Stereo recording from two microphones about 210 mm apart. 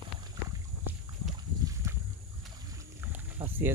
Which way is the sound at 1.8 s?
15° right (ahead or behind).